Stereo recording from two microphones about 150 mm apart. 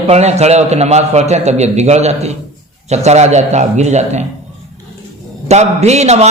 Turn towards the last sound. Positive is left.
turn(degrees=-45)  # may be behind; listen again after turning